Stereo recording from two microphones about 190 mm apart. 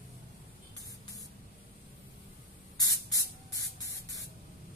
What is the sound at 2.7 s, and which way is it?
Spray, 20° left (ahead or behind).